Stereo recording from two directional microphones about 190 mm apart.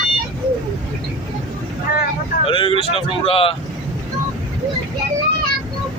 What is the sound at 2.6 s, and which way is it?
Speech, 30° right (ahead or behind).